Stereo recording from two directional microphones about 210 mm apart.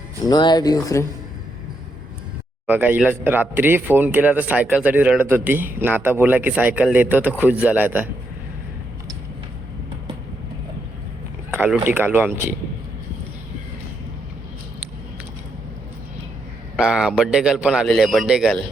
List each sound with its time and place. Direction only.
0.3 s speech: 20° left (ahead or behind)
2.6 s a man's voice: 10° right (ahead or behind)
11.5 s a man's voice: 10° right (ahead or behind)
16.7 s a man's voice: 5° right (ahead or behind)